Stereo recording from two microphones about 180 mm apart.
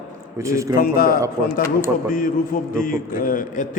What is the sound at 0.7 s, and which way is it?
A man's voice, 55° left (ahead or behind).